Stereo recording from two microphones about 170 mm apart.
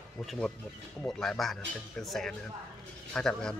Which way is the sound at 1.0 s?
5° left (ahead or behind).